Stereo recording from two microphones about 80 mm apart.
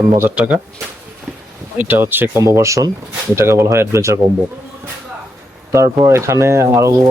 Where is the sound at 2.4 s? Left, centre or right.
Right.